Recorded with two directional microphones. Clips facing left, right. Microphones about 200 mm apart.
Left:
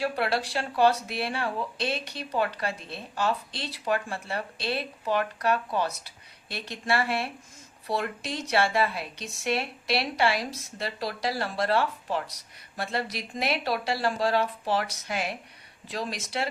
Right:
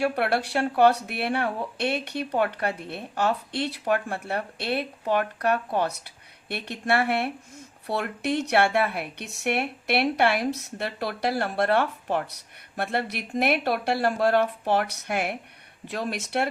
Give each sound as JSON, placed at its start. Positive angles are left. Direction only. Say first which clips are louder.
{"t": 0.0, "sound": "speech", "louder": "right 3 dB", "side_deg": -55}